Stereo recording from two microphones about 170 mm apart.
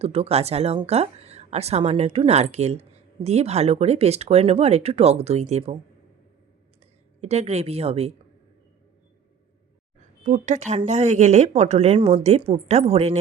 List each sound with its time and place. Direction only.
0.0 s speech: 35° right (ahead or behind)
7.2 s speech: 40° right (ahead or behind)
10.2 s speech: 45° right (ahead or behind)